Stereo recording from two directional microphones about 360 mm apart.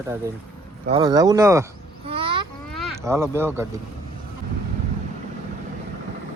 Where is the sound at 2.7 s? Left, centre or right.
Centre.